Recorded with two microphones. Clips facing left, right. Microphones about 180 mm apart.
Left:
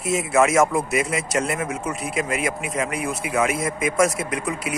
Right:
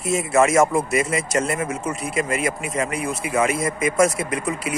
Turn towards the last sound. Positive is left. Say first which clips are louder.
# right 1 dB
turn(degrees=0)  # may be behind; listen again after turning